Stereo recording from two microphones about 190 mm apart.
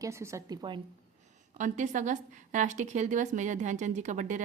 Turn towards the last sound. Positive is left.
turn(degrees=-40)  # may be behind; listen again after turning